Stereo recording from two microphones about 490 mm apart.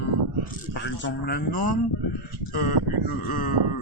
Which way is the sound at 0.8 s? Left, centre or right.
Left.